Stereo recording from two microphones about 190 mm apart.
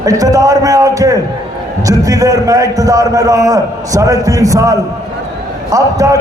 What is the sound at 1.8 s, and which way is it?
A man's voice, 15° right (ahead or behind).